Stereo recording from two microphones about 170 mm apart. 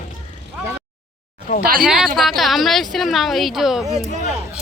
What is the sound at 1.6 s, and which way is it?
Speech, 55° right (ahead or behind).